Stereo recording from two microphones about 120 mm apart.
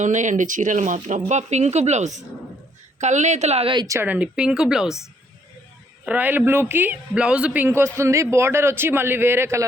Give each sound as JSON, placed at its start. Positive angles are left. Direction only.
{"t": 0.0, "sound": "speech", "side_deg": -90}
{"t": 1.3, "sound": "speech", "side_deg": -70}
{"t": 4.0, "sound": "speech", "side_deg": -10}
{"t": 6.1, "sound": "a man's voice", "side_deg": -15}